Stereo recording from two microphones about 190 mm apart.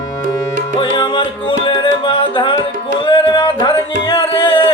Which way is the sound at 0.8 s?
25° left (ahead or behind).